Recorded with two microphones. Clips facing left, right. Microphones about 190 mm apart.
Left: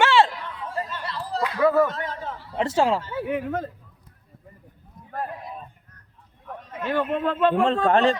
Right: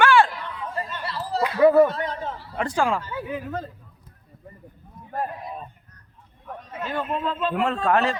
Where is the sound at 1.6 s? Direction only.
20° right (ahead or behind).